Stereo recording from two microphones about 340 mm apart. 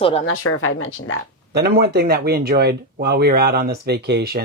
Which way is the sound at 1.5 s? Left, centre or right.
Right.